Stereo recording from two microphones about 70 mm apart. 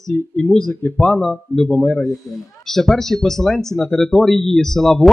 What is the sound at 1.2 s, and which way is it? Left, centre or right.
Speech, centre.